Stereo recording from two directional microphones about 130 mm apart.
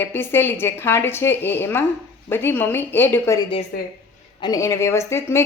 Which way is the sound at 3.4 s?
40° left (ahead or behind).